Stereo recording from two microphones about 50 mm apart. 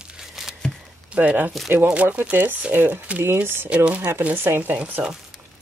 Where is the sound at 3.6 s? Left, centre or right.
Right.